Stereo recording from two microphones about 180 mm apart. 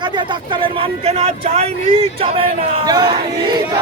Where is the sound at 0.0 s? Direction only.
25° right (ahead or behind).